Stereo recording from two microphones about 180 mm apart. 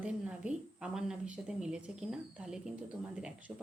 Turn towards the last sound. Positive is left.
turn(degrees=-5)  # may be behind; listen again after turning